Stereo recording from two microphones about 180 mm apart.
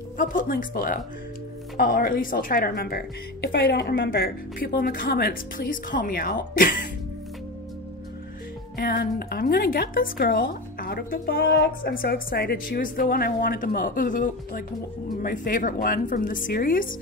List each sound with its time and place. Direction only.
0.2 s a woman's voice: 50° left (ahead or behind)
3.5 s a woman's voice: 70° left (ahead or behind); by 6.9 s 50° left (ahead or behind)
8.7 s a woman's voice: 60° left (ahead or behind)